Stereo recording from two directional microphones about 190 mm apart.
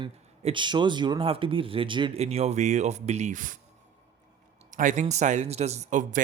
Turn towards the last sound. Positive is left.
turn(degrees=-40)  # may be behind; listen again after turning